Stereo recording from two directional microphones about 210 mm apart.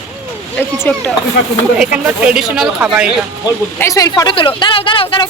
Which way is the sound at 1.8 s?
5° right (ahead or behind).